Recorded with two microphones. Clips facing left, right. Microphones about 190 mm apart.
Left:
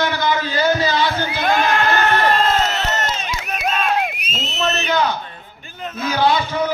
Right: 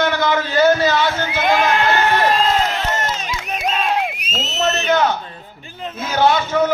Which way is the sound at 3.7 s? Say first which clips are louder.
Even; 25° right (ahead or behind).